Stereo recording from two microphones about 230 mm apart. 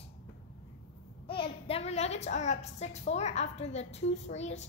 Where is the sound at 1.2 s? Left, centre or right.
Left.